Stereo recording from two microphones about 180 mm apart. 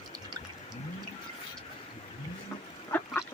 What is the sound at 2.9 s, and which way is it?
Duck, 10° left (ahead or behind).